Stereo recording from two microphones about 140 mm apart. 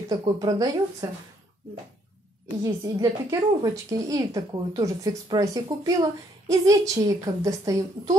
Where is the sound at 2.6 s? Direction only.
25° right (ahead or behind).